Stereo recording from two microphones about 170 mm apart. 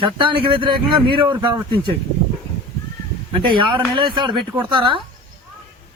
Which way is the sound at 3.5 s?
30° right (ahead or behind).